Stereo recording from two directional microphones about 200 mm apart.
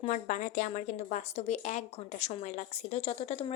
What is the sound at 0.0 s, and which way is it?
Speech, 35° left (ahead or behind).